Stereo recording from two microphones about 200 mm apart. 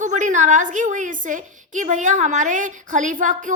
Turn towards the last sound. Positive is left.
turn(degrees=-40)  # may be behind; listen again after turning